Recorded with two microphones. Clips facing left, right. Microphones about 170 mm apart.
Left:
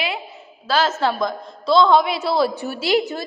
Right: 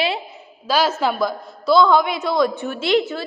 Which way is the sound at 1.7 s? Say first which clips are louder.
Even; 25° left (ahead or behind).